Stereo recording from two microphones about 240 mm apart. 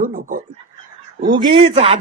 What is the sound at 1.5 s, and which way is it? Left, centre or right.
Speech, right.